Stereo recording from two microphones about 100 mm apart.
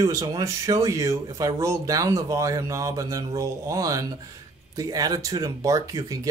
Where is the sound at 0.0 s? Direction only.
35° right (ahead or behind).